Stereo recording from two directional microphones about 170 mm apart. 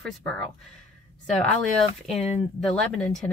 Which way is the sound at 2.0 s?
Centre (ahead or behind).